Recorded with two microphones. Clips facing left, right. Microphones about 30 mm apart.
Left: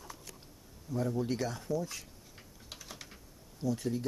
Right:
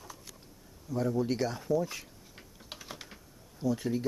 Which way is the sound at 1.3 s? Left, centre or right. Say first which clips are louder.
Right 3 dB; right.